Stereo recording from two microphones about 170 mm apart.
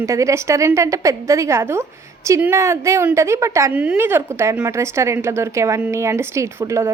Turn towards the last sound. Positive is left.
turn(degrees=-15)  # may be behind; listen again after turning